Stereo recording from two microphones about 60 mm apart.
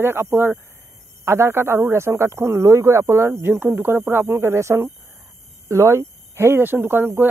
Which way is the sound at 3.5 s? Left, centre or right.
Right.